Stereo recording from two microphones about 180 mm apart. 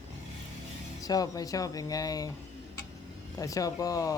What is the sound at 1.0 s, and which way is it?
Speech, 20° left (ahead or behind).